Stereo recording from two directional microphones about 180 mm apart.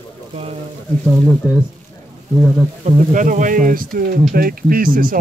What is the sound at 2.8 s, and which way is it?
Speech, 45° right (ahead or behind).